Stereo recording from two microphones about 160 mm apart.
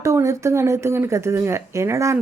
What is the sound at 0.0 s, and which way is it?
Speech, 20° right (ahead or behind).